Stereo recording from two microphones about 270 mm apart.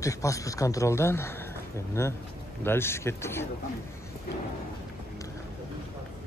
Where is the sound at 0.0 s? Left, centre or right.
Centre.